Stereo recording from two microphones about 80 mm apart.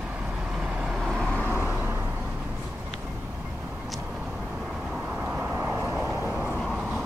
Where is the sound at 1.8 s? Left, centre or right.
Right.